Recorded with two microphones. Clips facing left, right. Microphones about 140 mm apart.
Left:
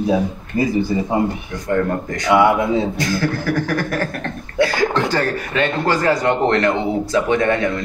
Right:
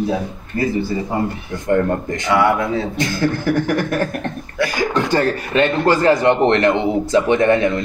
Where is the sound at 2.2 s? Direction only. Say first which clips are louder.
Left 3 dB; 20° left (ahead or behind).